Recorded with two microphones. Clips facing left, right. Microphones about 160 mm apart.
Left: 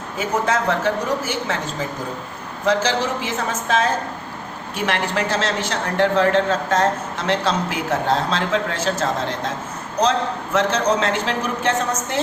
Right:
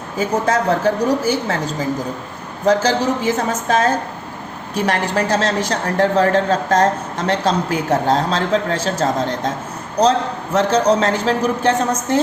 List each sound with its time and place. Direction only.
0.2 s a woman's voice: 40° right (ahead or behind)
2.6 s a woman's voice: 40° right (ahead or behind)